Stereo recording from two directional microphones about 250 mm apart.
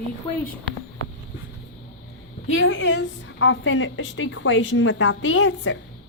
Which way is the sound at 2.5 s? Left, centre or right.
Left.